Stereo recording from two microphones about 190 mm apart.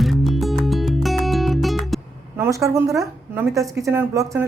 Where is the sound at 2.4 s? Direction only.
15° right (ahead or behind).